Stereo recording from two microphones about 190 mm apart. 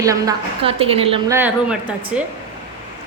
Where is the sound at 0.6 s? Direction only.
30° right (ahead or behind).